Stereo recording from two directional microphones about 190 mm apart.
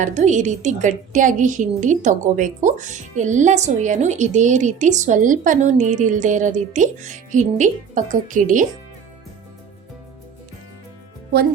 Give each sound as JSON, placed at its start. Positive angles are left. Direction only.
{"t": 0.0, "sound": "a woman's voice", "side_deg": -40}